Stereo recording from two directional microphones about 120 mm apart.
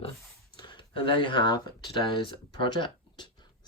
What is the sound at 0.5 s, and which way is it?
Speech, 40° left (ahead or behind).